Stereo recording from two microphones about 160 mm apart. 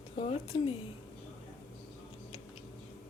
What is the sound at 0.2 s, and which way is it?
Speech, 35° left (ahead or behind).